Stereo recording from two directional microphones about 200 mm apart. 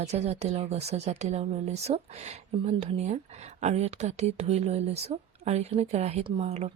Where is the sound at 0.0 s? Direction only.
35° right (ahead or behind).